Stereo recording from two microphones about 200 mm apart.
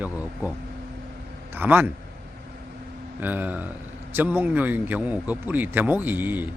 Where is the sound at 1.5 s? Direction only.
10° right (ahead or behind).